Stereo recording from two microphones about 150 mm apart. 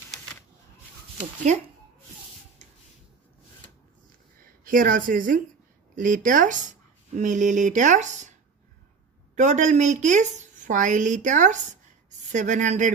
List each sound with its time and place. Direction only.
4.4 s speech: 65° right (ahead or behind)
9.3 s a woman's voice: 55° right (ahead or behind)